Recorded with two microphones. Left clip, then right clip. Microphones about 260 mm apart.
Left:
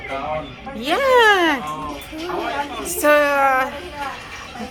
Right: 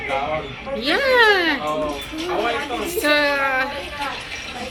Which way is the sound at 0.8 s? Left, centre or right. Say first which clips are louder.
Left 1 dB; centre.